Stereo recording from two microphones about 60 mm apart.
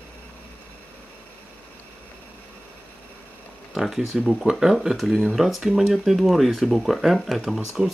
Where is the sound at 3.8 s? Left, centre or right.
Centre.